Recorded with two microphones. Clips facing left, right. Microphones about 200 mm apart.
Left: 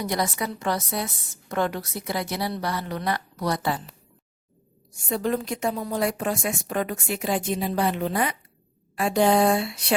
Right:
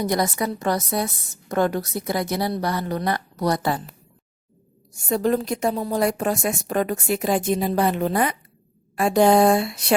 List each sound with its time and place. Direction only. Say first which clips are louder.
0.0 s a woman's voice: right 4 dB; 45° right (ahead or behind)
5.0 s a woman's voice: right 4 dB; 40° right (ahead or behind)